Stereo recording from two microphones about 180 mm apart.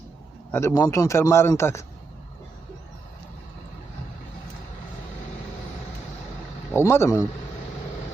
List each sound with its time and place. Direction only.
0.5 s a man's voice: 15° left (ahead or behind)
6.7 s a man's voice: 15° left (ahead or behind)